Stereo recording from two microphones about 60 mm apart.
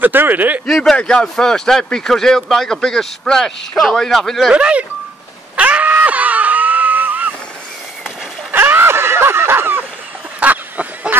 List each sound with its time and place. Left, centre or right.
0.0 s speech: right
0.7 s speech: centre
0.9 s speech: centre
4.5 s speech: centre
5.6 s screaming: right
8.5 s a sound: right
10.4 s a sound: right